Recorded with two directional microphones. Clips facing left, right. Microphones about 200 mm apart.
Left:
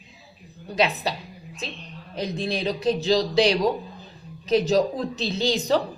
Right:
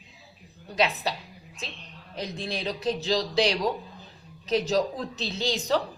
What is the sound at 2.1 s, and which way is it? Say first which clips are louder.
A woman's voice: left 6 dB; 30° left (ahead or behind).